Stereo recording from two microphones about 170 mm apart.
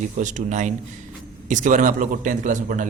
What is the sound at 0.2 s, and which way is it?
A man's voice, 45° right (ahead or behind).